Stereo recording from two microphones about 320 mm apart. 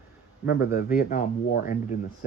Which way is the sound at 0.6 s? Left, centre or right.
Left.